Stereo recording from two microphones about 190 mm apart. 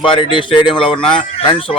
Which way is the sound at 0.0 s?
25° left (ahead or behind).